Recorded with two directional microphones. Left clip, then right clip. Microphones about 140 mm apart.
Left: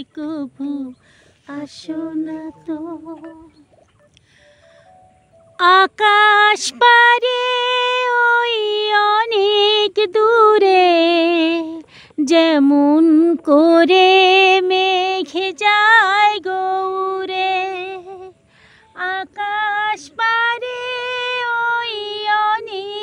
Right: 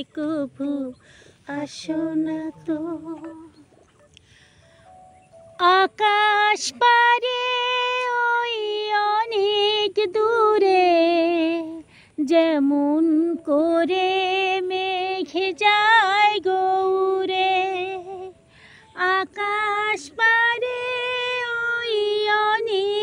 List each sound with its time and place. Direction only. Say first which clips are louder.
0.0 s a sound: even; 25° left (ahead or behind)
5.6 s female singing: left 5 dB; 45° left (ahead or behind); by 11.8 s 75° left (ahead or behind)
12.3 s speech: left 5 dB; 90° left
14.4 s music: left 10 dB; 90° left; by 18.3 s 25° left (ahead or behind)
18.9 s female singing: right 1 dB; 15° left (ahead or behind)